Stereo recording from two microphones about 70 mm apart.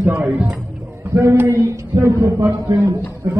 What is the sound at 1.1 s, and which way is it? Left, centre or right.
A woman's voice, right.